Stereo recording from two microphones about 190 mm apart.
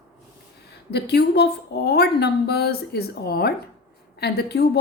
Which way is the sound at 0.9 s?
60° left (ahead or behind).